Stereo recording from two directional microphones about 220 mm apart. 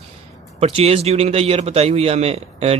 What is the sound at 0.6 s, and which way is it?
Speech, 25° right (ahead or behind).